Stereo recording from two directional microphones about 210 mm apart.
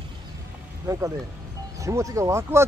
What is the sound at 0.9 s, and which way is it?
Speech, 15° right (ahead or behind).